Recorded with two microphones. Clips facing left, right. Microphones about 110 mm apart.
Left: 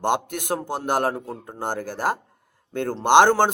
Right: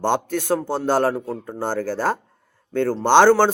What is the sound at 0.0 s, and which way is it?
Speech, 15° left (ahead or behind).